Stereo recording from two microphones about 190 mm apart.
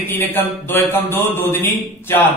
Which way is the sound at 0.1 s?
10° left (ahead or behind).